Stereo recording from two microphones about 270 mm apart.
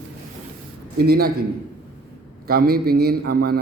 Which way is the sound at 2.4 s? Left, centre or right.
Right.